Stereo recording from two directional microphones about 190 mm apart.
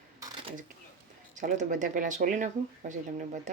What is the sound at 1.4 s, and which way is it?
Speech, 40° right (ahead or behind).